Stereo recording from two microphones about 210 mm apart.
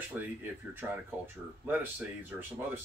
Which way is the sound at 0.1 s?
10° right (ahead or behind).